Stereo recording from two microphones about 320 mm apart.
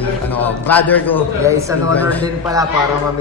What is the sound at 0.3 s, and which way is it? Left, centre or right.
Speech, centre.